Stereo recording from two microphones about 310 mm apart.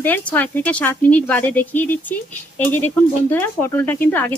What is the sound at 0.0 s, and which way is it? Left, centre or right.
Speech, centre.